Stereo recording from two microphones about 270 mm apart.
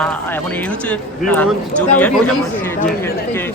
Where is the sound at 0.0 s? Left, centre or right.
Centre.